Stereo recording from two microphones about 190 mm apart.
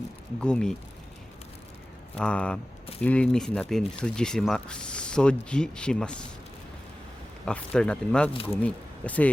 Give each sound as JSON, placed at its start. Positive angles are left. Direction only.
{"t": 0.3, "sound": "speech", "side_deg": 5}
{"t": 2.1, "sound": "speech", "side_deg": 5}
{"t": 7.4, "sound": "speech", "side_deg": 5}